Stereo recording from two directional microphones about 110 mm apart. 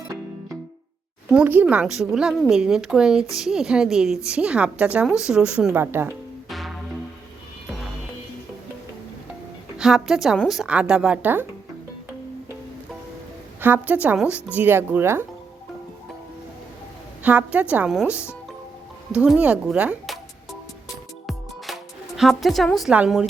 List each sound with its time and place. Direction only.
1.3 s a woman's voice: 15° right (ahead or behind)
5.7 s speech: 20° right (ahead or behind)
6.5 s music: centre (ahead or behind)
9.7 s a woman's voice: 5° right (ahead or behind)
13.6 s a woman's voice: 20° right (ahead or behind)
17.2 s a woman's voice: 15° right (ahead or behind)
19.1 s a woman's voice: 10° right (ahead or behind)
21.2 s music: centre (ahead or behind)